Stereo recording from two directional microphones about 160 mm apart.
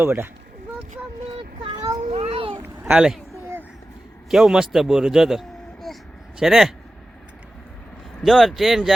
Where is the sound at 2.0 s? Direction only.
40° right (ahead or behind).